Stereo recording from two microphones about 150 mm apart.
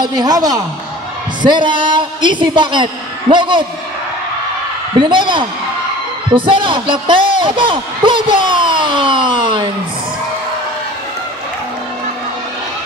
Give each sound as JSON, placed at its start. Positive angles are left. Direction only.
{"t": 0.0, "sound": "a woman's voice", "side_deg": -25}
{"t": 4.9, "sound": "a man's voice", "side_deg": -30}